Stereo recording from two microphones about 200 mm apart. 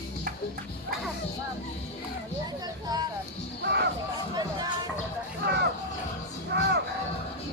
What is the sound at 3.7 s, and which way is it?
Music, 60° right (ahead or behind).